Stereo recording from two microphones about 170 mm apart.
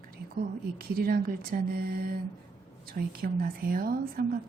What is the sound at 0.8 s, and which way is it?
A woman's voice, 60° right (ahead or behind).